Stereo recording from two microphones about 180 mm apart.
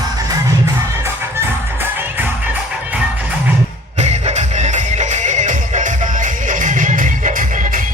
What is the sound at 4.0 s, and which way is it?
Music, 40° right (ahead or behind).